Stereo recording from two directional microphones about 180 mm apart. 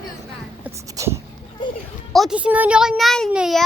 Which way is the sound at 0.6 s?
15° right (ahead or behind).